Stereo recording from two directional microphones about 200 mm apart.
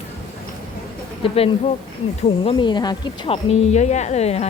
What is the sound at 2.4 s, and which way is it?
Speech, 25° left (ahead or behind).